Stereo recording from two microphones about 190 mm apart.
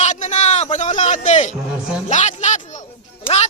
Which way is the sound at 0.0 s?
40° left (ahead or behind).